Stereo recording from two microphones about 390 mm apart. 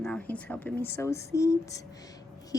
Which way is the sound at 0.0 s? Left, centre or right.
Centre.